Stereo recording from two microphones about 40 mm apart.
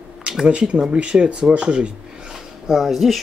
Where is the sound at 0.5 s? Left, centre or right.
Right.